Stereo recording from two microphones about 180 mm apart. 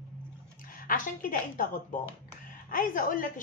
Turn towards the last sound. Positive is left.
turn(degrees=50)  # may be behind; listen again after turning